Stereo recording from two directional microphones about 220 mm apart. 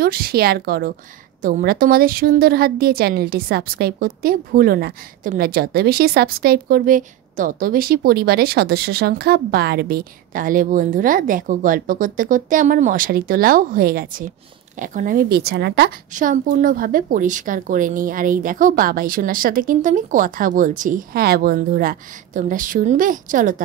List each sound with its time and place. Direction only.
0.0 s a woman's voice: 45° right (ahead or behind)
16.1 s a woman's voice: 35° right (ahead or behind)